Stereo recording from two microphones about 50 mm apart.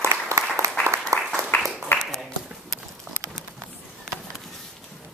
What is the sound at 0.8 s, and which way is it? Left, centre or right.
Applause, right.